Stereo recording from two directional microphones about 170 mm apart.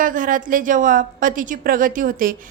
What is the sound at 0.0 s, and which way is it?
A woman's voice, 50° right (ahead or behind).